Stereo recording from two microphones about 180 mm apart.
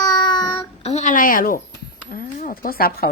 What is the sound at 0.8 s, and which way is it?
A woman's voice, 40° left (ahead or behind).